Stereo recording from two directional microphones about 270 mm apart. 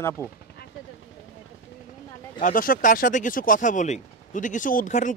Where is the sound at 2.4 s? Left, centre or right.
Left.